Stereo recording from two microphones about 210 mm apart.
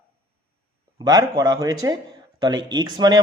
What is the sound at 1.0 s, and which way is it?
Speech, 20° right (ahead or behind).